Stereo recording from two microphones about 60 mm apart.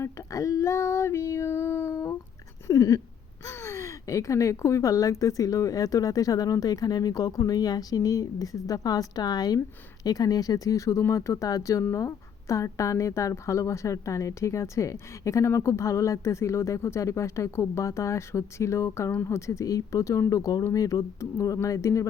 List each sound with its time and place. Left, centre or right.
0.0 s female singing: left
2.6 s a sound: left
3.6 s a sound: left
3.8 s a woman's voice: left
11.1 s a woman's voice: left
11.9 s a woman's voice: left
15.4 s speech: left
19.5 s a woman's voice: left
20.3 s speech: left
20.7 s a woman's voice: left